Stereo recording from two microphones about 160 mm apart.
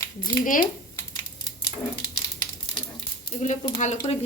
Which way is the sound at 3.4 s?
50° left (ahead or behind).